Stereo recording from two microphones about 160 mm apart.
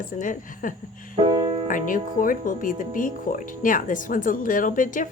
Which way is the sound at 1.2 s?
30° right (ahead or behind).